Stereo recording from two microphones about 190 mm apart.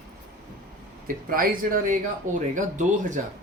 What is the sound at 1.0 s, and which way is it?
Speech, 50° right (ahead or behind).